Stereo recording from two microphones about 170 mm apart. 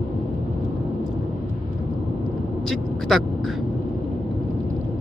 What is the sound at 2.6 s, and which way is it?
Vehicle, centre (ahead or behind).